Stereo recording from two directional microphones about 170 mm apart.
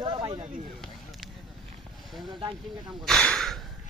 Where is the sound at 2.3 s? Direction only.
30° right (ahead or behind).